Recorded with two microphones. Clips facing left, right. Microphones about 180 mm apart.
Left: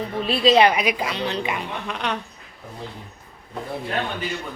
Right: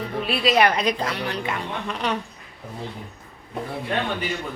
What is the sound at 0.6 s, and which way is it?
A woman's voice, 10° left (ahead or behind).